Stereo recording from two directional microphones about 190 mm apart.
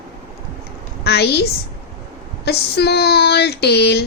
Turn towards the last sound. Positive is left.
turn(degrees=60)  # may be behind; listen again after turning